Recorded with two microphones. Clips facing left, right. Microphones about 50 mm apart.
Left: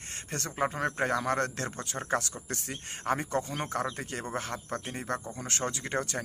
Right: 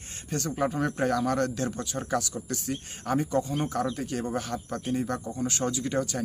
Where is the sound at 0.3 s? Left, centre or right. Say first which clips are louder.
Right 3 dB; left.